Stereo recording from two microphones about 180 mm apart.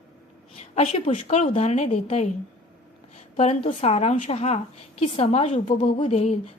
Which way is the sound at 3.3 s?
40° left (ahead or behind).